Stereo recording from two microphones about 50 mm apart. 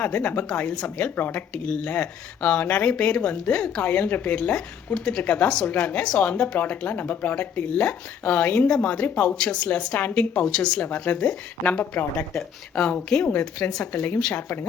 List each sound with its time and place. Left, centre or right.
0.0 s speech: left
6.2 s speech: left
9.3 s speech: centre
10.4 s speech: centre
10.8 s speech: left
12.7 s speech: left